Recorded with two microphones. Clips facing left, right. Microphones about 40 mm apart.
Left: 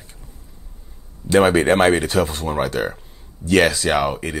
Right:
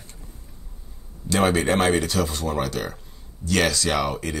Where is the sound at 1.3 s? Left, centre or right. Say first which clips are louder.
Left 6 dB; left.